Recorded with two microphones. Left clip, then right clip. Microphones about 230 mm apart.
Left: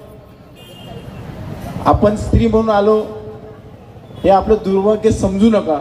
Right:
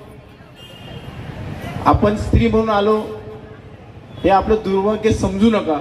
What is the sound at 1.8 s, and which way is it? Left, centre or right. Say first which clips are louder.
A man's voice: left 2 dB; left.